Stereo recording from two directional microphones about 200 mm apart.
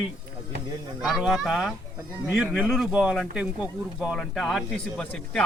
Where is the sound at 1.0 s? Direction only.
Centre (ahead or behind).